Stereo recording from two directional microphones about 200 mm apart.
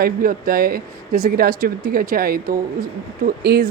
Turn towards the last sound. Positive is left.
turn(degrees=-55)  # may be behind; listen again after turning